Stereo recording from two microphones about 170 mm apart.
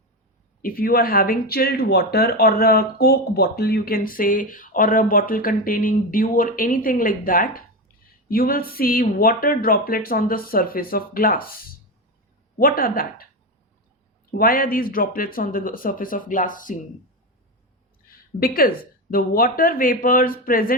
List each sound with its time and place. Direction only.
0.6 s speech: 60° left (ahead or behind)
14.3 s speech: 60° left (ahead or behind)
18.3 s speech: 60° left (ahead or behind)